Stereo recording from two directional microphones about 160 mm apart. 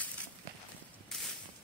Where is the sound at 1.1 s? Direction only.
Centre (ahead or behind).